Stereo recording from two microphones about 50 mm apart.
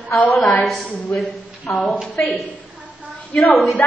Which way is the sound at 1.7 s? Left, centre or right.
Centre.